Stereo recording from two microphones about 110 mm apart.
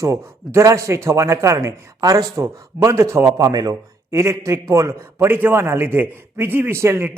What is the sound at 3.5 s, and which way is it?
Speech, 40° right (ahead or behind).